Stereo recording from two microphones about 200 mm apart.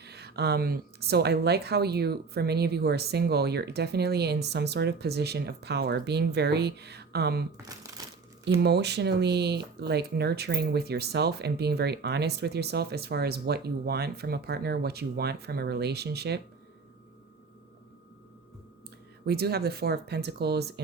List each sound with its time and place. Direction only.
0.0 s speech: 55° right (ahead or behind)
8.0 s crumpling: 20° right (ahead or behind)
8.4 s speech: 55° right (ahead or behind)
19.2 s speech: 55° right (ahead or behind)